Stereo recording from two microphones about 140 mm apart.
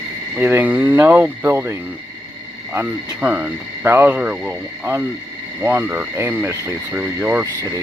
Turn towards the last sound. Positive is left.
turn(degrees=-10)  # may be behind; listen again after turning